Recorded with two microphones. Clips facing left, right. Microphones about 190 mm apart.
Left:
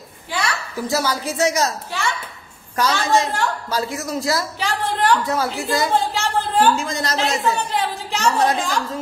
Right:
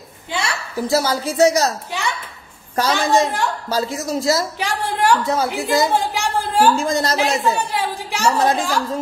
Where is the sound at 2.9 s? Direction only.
15° right (ahead or behind).